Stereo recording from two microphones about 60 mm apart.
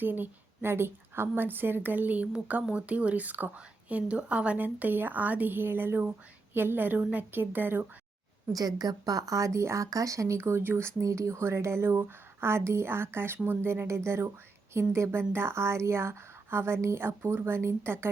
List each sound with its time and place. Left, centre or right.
0.0 s speech: right
4.5 s speech: right
8.5 s speech: right
10.6 s speech: right
11.0 s speech: right